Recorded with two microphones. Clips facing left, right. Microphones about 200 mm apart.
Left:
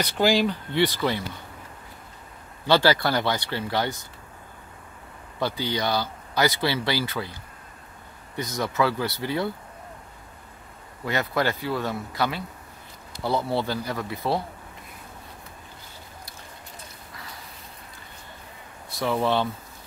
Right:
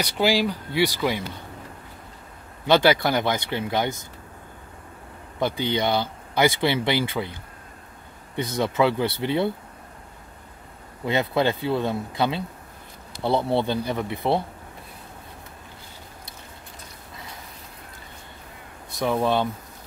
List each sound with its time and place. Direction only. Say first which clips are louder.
0.0 s speech: even; 10° right (ahead or behind)
2.6 s speech: right 2 dB; 20° right (ahead or behind)
5.4 s speech: right 3 dB; 20° right (ahead or behind)
8.5 s speech: right 3 dB; 25° right (ahead or behind)
11.1 s speech: right 3 dB; 25° right (ahead or behind)
18.9 s speech: right 1 dB; 15° right (ahead or behind)